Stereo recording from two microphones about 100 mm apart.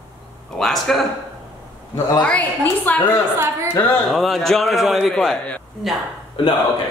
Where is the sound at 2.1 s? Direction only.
15° left (ahead or behind).